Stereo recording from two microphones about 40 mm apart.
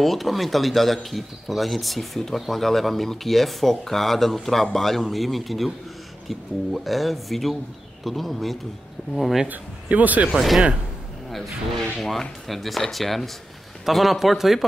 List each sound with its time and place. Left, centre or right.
0.0 s speech: centre
9.8 s speech: right
10.3 s speech: centre
12.0 s speech: centre